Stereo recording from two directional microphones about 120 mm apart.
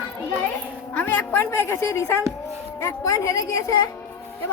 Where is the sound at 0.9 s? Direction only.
15° left (ahead or behind).